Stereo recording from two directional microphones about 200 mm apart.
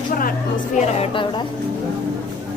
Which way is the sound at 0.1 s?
45° left (ahead or behind).